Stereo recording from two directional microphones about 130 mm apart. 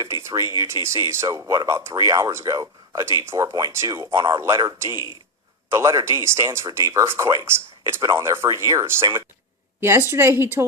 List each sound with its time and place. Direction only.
0.0 s a woman's voice: 20° right (ahead or behind)